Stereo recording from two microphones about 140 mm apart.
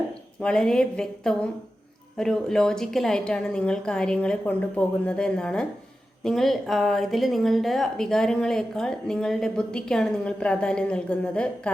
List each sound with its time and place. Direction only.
0.4 s a woman's voice: 5° left (ahead or behind)